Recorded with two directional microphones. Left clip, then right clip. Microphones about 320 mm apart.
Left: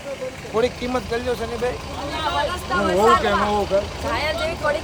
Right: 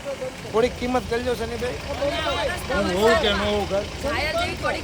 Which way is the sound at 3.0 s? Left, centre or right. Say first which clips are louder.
Left 3 dB; centre.